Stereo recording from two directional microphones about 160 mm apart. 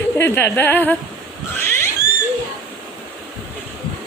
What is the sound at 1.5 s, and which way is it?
Cat, 15° left (ahead or behind).